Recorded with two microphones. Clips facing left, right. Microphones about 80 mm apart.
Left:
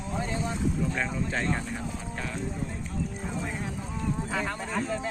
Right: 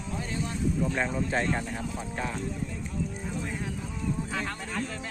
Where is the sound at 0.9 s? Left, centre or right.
Centre.